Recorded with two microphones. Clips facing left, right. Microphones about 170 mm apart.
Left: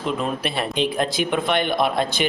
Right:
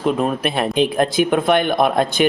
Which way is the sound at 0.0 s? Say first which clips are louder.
Right 6 dB; 50° right (ahead or behind).